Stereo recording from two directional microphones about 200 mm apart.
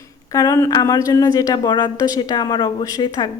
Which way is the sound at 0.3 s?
15° left (ahead or behind).